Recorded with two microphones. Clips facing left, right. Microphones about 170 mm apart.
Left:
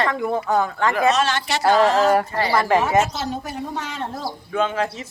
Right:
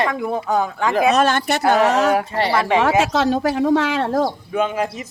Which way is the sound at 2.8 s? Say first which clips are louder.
Right 3 dB; 80° right.